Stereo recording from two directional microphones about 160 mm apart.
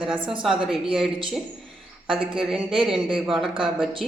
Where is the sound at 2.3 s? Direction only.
5° right (ahead or behind).